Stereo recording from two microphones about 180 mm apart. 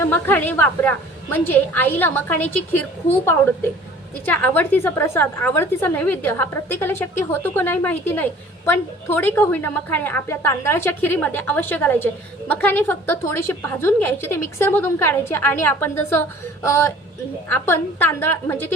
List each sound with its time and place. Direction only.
0.0 s a woman's voice: 10° left (ahead or behind)